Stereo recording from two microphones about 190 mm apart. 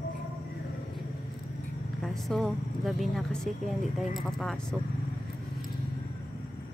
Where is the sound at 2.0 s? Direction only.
Centre (ahead or behind).